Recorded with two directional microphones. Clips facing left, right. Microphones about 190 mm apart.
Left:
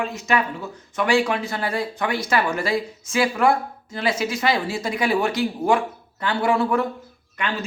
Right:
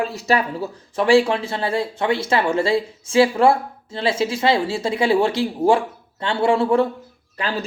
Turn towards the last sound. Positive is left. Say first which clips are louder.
# right 2 dB
turn(degrees=-35)  # may be behind; listen again after turning